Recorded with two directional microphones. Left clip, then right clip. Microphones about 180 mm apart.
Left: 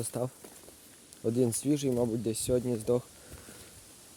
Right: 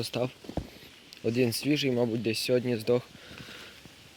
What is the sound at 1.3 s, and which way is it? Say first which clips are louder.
Speech: right 2 dB; 25° left (ahead or behind).